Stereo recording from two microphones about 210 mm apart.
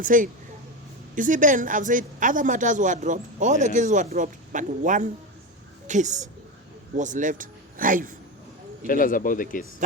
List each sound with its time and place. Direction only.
0.0 s a woman's voice: 40° right (ahead or behind)
8.9 s speech: 40° left (ahead or behind)